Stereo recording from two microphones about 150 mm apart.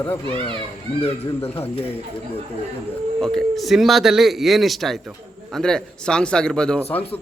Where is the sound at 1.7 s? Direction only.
40° left (ahead or behind).